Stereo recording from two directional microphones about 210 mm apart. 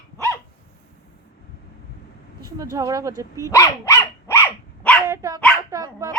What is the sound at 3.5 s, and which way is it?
Dog, 15° left (ahead or behind).